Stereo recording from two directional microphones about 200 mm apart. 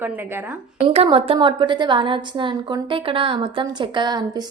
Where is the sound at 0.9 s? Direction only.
25° right (ahead or behind).